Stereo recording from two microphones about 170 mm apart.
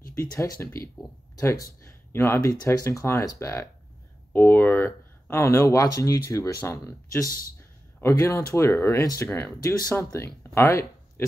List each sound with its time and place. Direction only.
0.6 s speech: 15° left (ahead or behind)
1.9 s speech: 15° left (ahead or behind)